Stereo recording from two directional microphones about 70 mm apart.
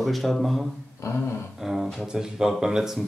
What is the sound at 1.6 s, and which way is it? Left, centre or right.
Speech, centre.